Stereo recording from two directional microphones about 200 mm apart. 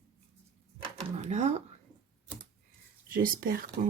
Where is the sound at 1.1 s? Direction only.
35° right (ahead or behind).